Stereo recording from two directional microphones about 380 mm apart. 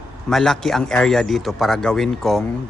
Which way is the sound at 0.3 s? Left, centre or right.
Centre.